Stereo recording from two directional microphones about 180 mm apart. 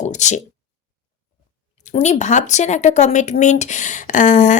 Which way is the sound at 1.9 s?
40° left (ahead or behind).